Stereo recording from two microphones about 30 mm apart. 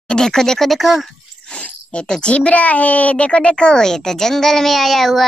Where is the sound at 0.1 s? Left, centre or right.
Centre.